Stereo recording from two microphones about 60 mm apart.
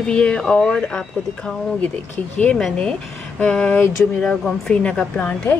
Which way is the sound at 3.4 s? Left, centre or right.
Centre.